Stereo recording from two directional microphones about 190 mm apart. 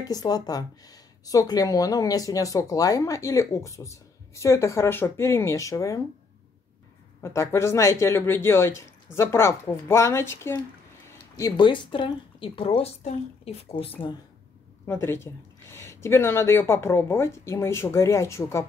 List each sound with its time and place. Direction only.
0.0 s speech: 20° left (ahead or behind)
7.2 s speech: 15° left (ahead or behind); by 13.9 s 30° left (ahead or behind)
14.9 s speech: 10° left (ahead or behind)